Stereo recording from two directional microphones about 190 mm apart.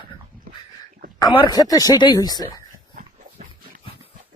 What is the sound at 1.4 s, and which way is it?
Speech, 20° left (ahead or behind).